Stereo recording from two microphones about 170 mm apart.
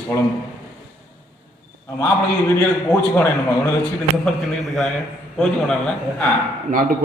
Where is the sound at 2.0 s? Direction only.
10° left (ahead or behind).